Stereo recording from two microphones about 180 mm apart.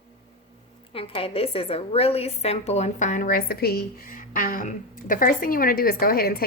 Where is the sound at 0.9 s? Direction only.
30° left (ahead or behind).